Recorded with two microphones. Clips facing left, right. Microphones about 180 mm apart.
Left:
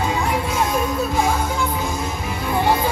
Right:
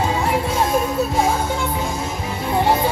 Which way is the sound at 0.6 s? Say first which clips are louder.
Right 1 dB; 30° right (ahead or behind).